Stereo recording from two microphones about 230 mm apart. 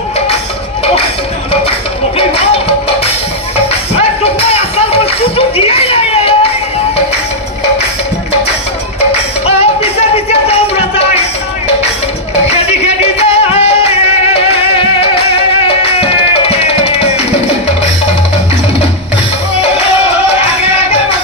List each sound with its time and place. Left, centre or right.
2.1 s music: left
4.2 s a sound: left
9.6 s music: left
12.4 s music: left